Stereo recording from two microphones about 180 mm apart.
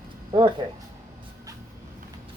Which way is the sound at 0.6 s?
30° right (ahead or behind).